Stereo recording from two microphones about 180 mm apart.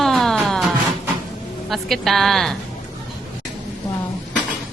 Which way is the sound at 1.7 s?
Centre (ahead or behind).